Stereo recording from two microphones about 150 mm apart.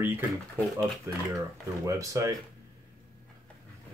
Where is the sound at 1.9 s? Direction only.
20° right (ahead or behind).